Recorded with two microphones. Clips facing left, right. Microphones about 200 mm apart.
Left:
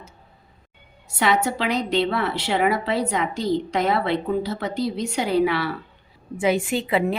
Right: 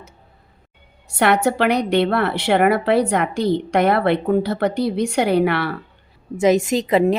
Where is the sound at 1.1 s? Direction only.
65° right (ahead or behind).